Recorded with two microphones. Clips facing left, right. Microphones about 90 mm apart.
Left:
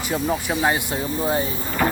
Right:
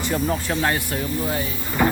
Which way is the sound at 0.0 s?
5° left (ahead or behind).